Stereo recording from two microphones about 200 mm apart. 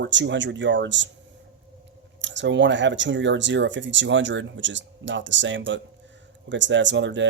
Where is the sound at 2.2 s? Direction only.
65° right (ahead or behind).